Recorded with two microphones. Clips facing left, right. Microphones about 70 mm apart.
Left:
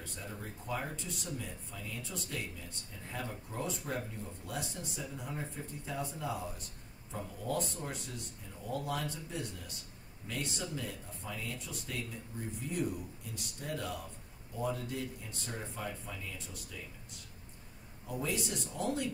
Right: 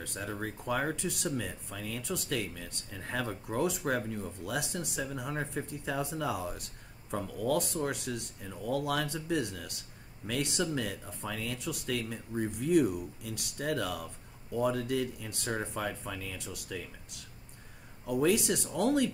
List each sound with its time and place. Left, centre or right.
0.0 s speech: right